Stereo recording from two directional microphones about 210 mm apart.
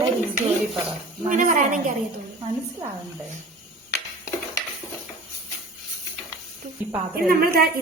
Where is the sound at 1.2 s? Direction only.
40° right (ahead or behind).